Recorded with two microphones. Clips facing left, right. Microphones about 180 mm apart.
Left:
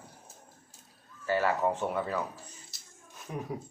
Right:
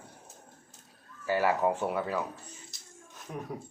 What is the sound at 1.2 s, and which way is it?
Speech, 10° right (ahead or behind).